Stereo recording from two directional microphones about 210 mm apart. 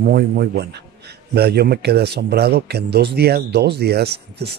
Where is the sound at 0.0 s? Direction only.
45° right (ahead or behind).